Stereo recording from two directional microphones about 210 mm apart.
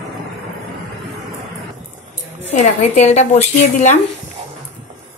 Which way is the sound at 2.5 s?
35° left (ahead or behind).